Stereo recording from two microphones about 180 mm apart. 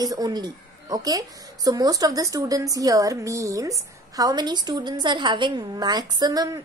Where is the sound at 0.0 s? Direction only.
20° right (ahead or behind).